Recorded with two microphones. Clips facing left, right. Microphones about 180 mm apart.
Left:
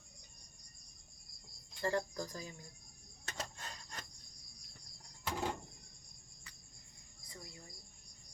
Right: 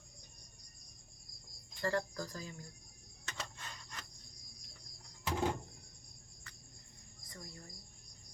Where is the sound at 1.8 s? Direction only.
15° left (ahead or behind).